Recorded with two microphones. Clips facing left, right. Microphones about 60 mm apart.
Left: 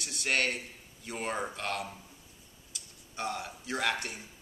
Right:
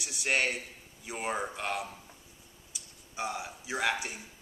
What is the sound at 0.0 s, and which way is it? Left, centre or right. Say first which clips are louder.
A man's voice: right 1 dB; centre.